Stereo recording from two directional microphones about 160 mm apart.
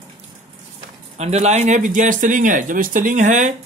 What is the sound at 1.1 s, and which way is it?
Speech, 45° right (ahead or behind).